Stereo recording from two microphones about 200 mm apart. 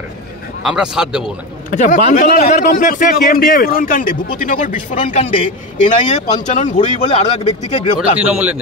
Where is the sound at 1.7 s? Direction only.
35° left (ahead or behind).